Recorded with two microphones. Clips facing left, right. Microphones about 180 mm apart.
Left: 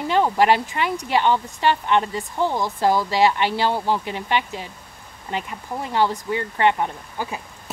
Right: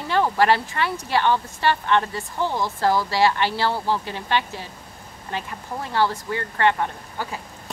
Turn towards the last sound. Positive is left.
turn(degrees=15)  # may be behind; listen again after turning